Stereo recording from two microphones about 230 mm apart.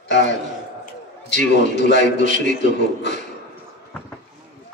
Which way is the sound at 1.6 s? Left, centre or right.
Left.